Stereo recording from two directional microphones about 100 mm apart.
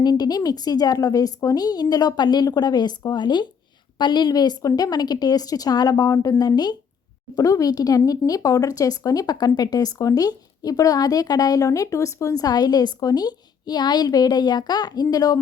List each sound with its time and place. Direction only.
0.0 s speech: 45° left (ahead or behind)